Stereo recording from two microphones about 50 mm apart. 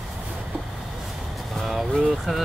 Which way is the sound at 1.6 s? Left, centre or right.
Centre.